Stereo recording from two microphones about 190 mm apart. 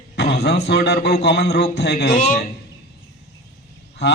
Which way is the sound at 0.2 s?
60° left (ahead or behind).